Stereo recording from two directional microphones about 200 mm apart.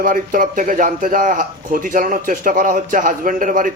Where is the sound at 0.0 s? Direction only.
45° right (ahead or behind).